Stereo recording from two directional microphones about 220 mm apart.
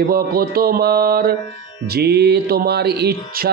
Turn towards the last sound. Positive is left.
turn(degrees=-45)  # may be behind; listen again after turning